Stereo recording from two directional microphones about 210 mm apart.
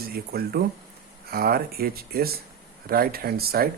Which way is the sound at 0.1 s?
45° right (ahead or behind).